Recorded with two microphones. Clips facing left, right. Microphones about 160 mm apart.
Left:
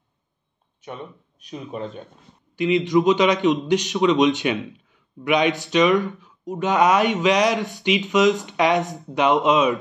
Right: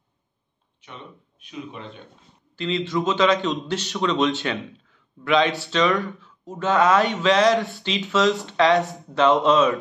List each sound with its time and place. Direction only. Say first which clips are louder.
1.4 s speech: left 5 dB; 40° left (ahead or behind)
2.5 s speech: left 6 dB; 15° left (ahead or behind)